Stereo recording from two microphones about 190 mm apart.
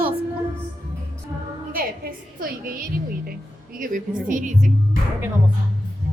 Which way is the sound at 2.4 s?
50° right (ahead or behind).